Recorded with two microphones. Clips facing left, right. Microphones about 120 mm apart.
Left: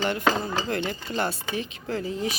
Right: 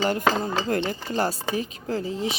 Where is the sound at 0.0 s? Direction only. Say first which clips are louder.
Right 2 dB; 40° right (ahead or behind).